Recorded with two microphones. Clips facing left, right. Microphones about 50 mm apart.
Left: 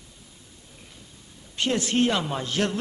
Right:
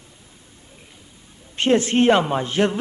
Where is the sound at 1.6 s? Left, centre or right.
Right.